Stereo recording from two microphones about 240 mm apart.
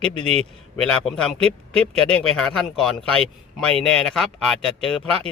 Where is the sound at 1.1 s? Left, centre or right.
Centre.